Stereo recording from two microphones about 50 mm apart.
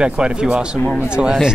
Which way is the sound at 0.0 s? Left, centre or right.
Centre.